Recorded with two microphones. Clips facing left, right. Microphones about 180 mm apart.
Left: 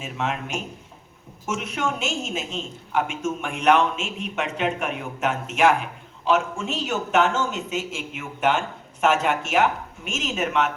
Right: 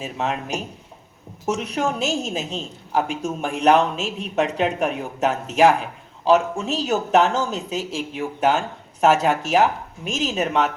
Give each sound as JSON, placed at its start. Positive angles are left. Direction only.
{"t": 0.0, "sound": "a woman's voice", "side_deg": -35}